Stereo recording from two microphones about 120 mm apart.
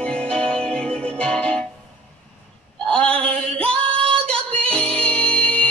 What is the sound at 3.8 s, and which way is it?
Female singing, 50° right (ahead or behind).